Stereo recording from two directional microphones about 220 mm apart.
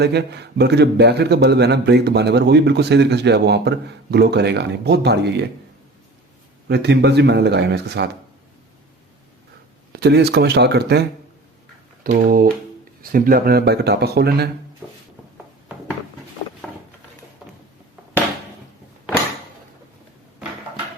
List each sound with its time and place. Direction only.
0.0 s a man's voice: 50° right (ahead or behind)
6.7 s a man's voice: 50° right (ahead or behind)
9.9 s a man's voice: 50° right (ahead or behind)
12.3 s a man's voice: 40° right (ahead or behind)